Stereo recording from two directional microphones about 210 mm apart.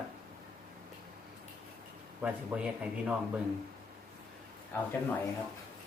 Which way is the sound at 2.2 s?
5° right (ahead or behind).